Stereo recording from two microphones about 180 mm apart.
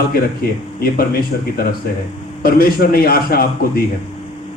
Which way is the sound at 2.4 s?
55° left (ahead or behind).